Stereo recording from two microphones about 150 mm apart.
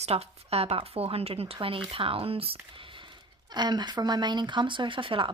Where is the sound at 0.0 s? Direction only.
45° right (ahead or behind).